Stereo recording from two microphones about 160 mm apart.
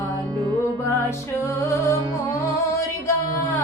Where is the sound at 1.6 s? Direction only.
20° left (ahead or behind).